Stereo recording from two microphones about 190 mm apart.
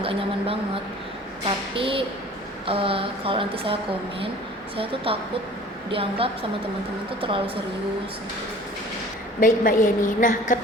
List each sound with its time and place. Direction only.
0.0 s speech: 30° right (ahead or behind)
5.1 s speech: 30° right (ahead or behind)
9.4 s a woman's voice: 45° left (ahead or behind)